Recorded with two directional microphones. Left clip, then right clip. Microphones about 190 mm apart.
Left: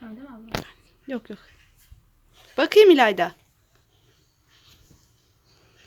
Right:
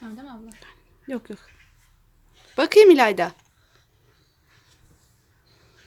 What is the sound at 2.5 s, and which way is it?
Speech, centre (ahead or behind).